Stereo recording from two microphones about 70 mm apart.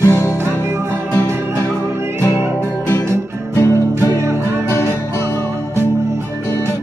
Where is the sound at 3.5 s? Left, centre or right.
Left.